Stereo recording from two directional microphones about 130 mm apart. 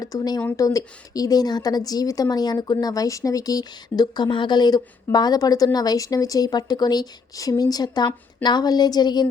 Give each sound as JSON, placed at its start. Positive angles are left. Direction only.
{"t": 0.0, "sound": "a woman's voice", "side_deg": 30}